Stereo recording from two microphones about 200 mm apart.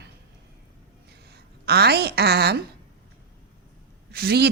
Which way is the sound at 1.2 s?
55° right (ahead or behind).